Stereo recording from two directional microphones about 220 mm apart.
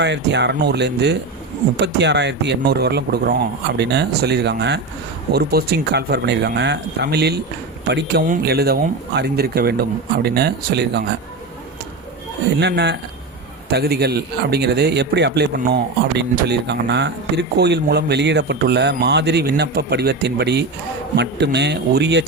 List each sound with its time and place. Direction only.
0.0 s a man's voice: 50° right (ahead or behind)
12.5 s a man's voice: 50° right (ahead or behind)